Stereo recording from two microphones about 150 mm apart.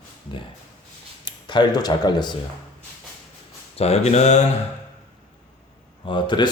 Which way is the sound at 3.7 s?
45° left (ahead or behind).